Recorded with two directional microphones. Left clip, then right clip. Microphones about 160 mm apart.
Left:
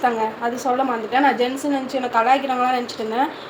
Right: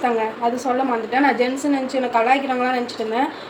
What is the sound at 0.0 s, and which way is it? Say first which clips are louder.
A woman's voice: even; 15° left (ahead or behind).